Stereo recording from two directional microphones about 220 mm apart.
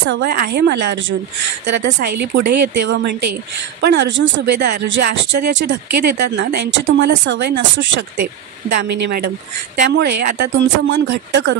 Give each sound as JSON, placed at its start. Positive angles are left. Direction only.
{"t": 0.1, "sound": "speech", "side_deg": -45}